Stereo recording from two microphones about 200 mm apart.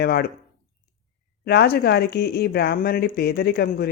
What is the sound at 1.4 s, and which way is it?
Speech, 55° left (ahead or behind).